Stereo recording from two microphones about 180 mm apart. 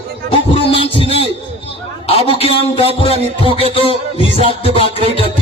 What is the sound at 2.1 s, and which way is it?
Music, 35° left (ahead or behind).